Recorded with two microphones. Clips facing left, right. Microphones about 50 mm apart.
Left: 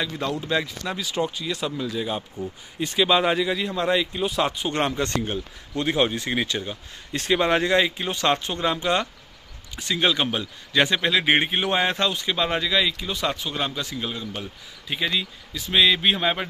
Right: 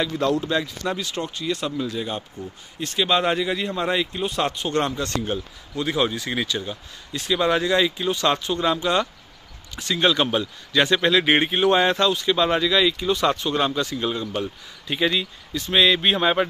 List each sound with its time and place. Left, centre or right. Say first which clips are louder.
0.0 s speech: right 5 dB; centre
4.7 s speech: right 1 dB; left
7.1 s speech: even; left
9.9 s speech: right 3 dB; centre
11.0 s speech: right 2 dB; centre